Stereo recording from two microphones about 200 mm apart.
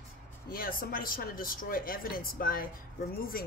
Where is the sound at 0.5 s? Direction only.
45° left (ahead or behind).